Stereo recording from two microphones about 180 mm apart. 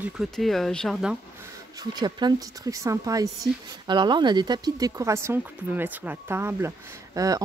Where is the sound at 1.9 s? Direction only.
25° right (ahead or behind).